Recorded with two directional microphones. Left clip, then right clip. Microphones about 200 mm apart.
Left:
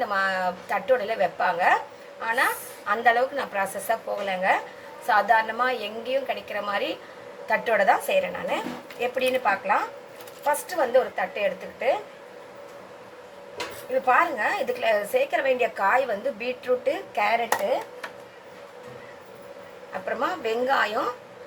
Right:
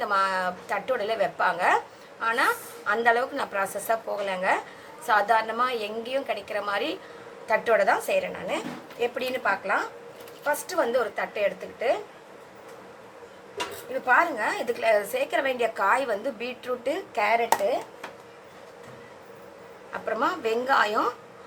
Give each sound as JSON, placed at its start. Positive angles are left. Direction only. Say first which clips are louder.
{"t": 0.0, "sound": "a woman's voice", "louder": "even", "side_deg": -20}
{"t": 14.1, "sound": "speech", "louder": "even", "side_deg": -20}
{"t": 20.1, "sound": "speech", "louder": "right 1 dB", "side_deg": -20}